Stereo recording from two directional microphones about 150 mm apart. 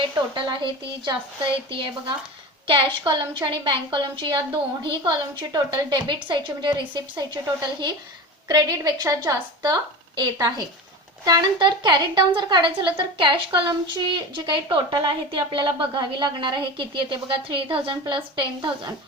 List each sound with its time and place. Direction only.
0.3 s a woman's voice: 30° right (ahead or behind)
8.4 s a woman's voice: 25° right (ahead or behind)